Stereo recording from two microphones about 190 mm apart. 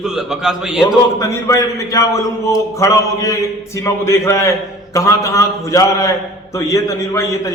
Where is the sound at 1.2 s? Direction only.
15° left (ahead or behind).